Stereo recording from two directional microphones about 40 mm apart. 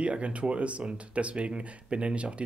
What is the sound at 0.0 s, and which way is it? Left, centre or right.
Speech, right.